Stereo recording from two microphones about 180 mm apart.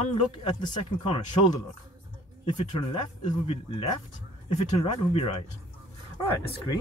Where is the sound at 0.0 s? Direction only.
35° left (ahead or behind).